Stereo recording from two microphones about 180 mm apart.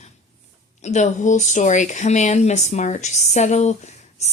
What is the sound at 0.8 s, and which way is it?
Speech, 40° left (ahead or behind).